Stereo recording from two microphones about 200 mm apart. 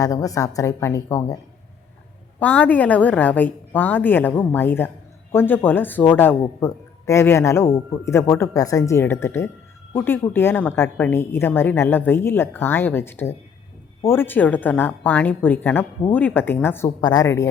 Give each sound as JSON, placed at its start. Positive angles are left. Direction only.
{"t": 0.0, "sound": "a woman's voice", "side_deg": 15}
{"t": 2.4, "sound": "a woman's voice", "side_deg": 5}